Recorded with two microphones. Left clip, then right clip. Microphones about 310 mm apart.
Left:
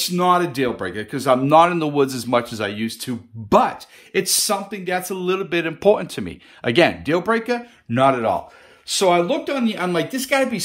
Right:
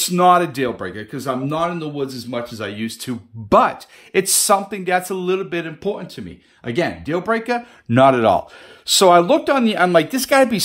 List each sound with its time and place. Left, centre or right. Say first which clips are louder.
0.0 s speech: right 4 dB; centre
2.6 s speech: left 2 dB; centre
7.9 s speech: right 4 dB; right